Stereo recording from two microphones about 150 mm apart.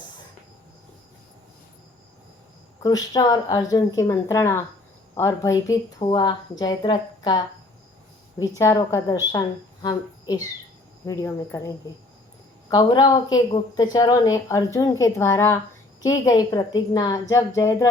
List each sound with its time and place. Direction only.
2.8 s a woman's voice: 25° left (ahead or behind)
12.7 s a woman's voice: 25° left (ahead or behind)